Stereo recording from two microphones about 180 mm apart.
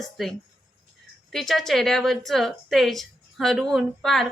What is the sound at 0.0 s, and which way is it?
A woman's voice, centre (ahead or behind).